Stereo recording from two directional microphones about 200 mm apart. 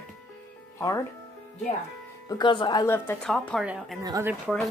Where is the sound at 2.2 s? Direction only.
20° left (ahead or behind); by 4.0 s centre (ahead or behind).